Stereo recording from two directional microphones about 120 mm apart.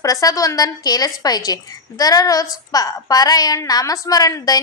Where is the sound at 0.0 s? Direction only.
30° left (ahead or behind).